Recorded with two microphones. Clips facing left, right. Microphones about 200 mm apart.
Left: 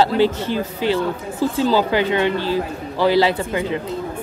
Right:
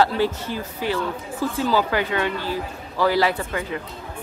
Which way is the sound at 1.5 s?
25° left (ahead or behind).